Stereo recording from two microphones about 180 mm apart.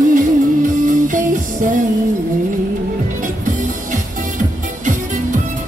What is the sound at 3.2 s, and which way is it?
Music, 45° right (ahead or behind).